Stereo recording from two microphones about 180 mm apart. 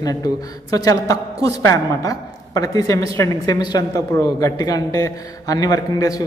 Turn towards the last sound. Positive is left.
turn(degrees=20)  # may be behind; listen again after turning